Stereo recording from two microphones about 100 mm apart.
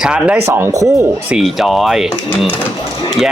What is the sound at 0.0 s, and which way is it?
Speech, 10° right (ahead or behind).